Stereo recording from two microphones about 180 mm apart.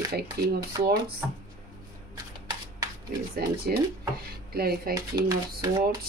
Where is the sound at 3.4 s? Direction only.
60° right (ahead or behind).